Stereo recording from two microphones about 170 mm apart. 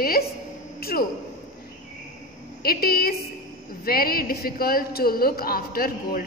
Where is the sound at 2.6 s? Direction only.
65° left (ahead or behind).